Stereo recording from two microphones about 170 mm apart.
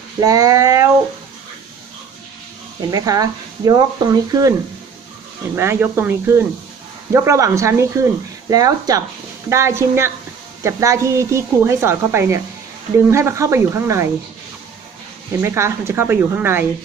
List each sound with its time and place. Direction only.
0.2 s speech: 20° right (ahead or behind)
2.9 s speech: 20° right (ahead or behind)
5.6 s speech: 15° right (ahead or behind)
15.4 s speech: 15° right (ahead or behind)